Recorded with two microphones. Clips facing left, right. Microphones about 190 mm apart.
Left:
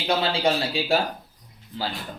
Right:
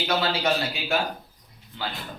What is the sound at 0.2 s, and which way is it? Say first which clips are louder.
Speech: left 2 dB; 30° left (ahead or behind).